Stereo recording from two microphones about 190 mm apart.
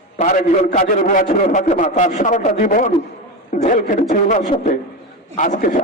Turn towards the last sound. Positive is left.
turn(degrees=45)  # may be behind; listen again after turning